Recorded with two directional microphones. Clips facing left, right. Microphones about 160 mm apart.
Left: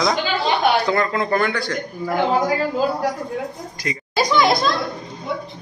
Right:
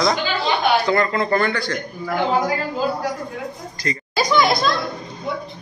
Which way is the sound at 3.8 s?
10° left (ahead or behind).